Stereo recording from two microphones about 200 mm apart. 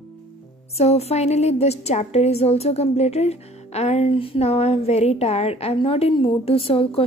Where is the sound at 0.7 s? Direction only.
30° left (ahead or behind).